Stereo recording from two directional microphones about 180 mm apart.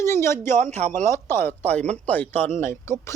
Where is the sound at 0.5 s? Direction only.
40° right (ahead or behind).